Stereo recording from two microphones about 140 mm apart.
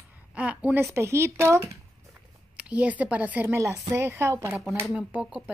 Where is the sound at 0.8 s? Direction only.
20° right (ahead or behind).